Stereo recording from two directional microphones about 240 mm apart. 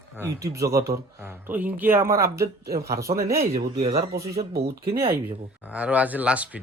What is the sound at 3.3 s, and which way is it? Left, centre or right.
Speech, right.